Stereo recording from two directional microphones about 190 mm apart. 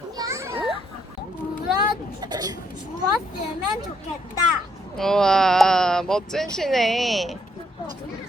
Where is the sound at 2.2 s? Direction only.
20° right (ahead or behind).